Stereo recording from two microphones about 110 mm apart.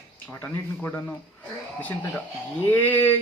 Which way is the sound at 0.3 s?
15° left (ahead or behind).